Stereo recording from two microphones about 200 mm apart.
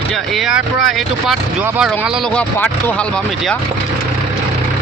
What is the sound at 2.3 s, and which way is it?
Speech, 10° left (ahead or behind).